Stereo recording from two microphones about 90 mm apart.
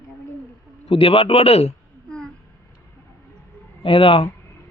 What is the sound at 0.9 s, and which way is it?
Speech, 85° left.